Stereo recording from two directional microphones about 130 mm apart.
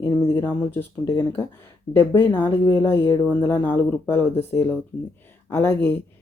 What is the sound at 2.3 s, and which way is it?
Speech, 15° left (ahead or behind).